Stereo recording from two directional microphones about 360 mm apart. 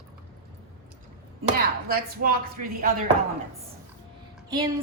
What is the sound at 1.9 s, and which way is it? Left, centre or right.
Speech, right.